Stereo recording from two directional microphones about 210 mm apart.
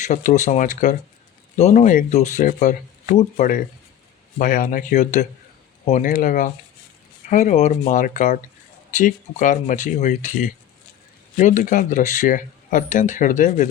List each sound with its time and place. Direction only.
0.0 s speech: 35° left (ahead or behind)